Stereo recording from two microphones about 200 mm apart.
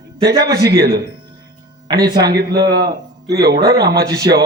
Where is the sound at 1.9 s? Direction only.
20° right (ahead or behind).